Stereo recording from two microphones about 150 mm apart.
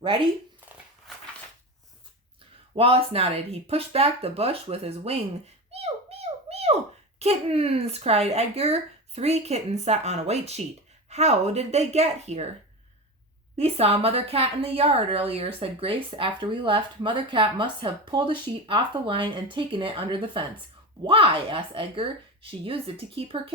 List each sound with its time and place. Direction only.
2.7 s a woman's voice: 40° right (ahead or behind)
5.7 s a sound: 45° right (ahead or behind)
7.2 s speech: 45° right (ahead or behind)
13.6 s a woman's voice: 45° right (ahead or behind)